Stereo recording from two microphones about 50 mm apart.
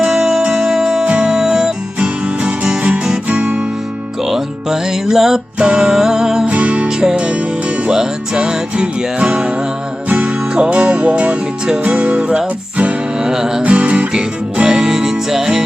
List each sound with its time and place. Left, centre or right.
0.0 s music: centre
1.0 s music: right
1.4 s music: centre
2.0 s guitar: right
4.2 s music: centre
5.5 s music: right
6.4 s music: right
13.1 s music: centre
13.7 s music: right
14.1 s music: centre